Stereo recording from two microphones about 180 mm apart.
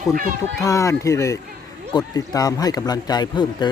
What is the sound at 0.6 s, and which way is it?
Speech, 20° left (ahead or behind).